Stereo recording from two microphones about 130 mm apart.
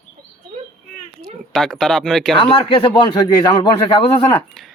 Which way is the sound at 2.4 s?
40° left (ahead or behind).